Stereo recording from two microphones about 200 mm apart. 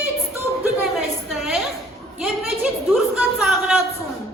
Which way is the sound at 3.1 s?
5° right (ahead or behind).